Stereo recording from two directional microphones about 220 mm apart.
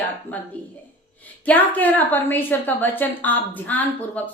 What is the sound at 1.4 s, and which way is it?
A woman's voice, 5° left (ahead or behind).